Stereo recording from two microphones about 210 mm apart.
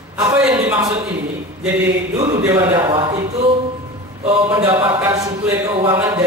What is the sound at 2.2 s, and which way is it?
Speech, 15° right (ahead or behind).